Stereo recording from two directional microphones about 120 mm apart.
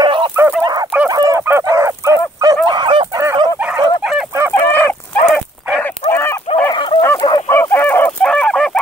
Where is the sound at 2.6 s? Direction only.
40° right (ahead or behind).